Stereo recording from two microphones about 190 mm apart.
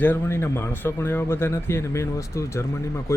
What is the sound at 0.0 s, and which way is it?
Speech, 10° left (ahead or behind).